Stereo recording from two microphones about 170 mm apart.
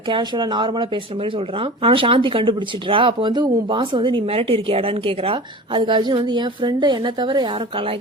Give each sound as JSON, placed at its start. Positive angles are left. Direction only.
{"t": 0.1, "sound": "speech", "side_deg": -25}